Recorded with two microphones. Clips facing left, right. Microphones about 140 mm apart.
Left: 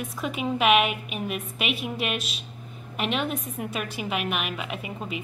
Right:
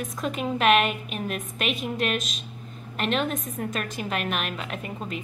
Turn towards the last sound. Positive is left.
turn(degrees=5)  # may be behind; listen again after turning